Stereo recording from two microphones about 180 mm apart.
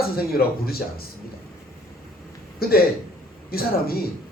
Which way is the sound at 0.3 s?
60° left (ahead or behind).